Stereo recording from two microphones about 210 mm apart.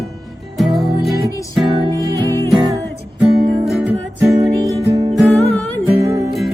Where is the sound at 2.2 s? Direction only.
15° left (ahead or behind).